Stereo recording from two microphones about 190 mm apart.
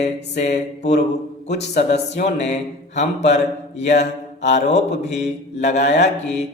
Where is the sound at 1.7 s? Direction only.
65° left (ahead or behind).